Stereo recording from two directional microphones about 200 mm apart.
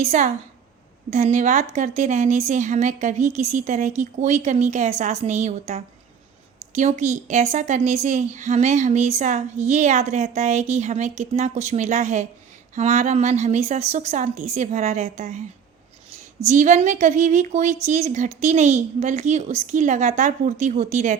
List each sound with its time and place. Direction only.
0.0 s a woman's voice: 35° right (ahead or behind)
16.5 s a woman's voice: 40° right (ahead or behind)